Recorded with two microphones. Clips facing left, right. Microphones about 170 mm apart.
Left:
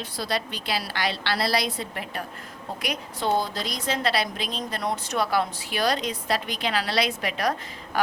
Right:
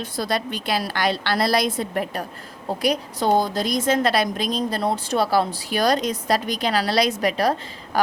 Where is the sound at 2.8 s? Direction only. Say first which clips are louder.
Right 7 dB; 35° right (ahead or behind).